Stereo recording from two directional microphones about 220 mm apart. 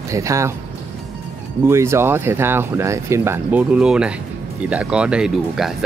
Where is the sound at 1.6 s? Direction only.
10° right (ahead or behind).